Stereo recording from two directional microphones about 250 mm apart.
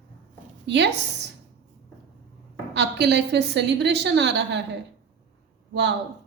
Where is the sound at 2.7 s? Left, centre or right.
Right.